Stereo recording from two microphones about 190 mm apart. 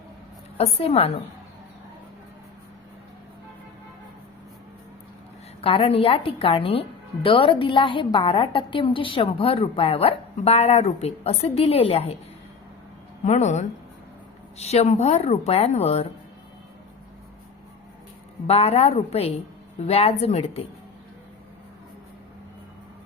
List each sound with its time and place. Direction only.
0.5 s a woman's voice: 30° left (ahead or behind)
5.6 s a woman's voice: 30° left (ahead or behind)
13.2 s a woman's voice: 35° left (ahead or behind)
18.4 s a woman's voice: 30° left (ahead or behind)